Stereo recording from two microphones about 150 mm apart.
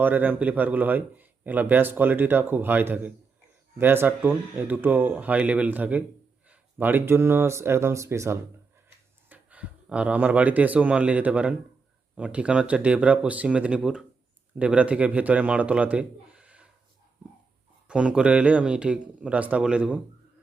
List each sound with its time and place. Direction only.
0.0 s a man's voice: 10° right (ahead or behind)
17.8 s speech: 5° right (ahead or behind)